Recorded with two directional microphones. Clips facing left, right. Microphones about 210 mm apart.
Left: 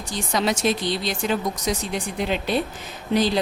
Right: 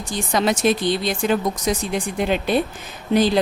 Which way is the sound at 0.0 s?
55° right (ahead or behind).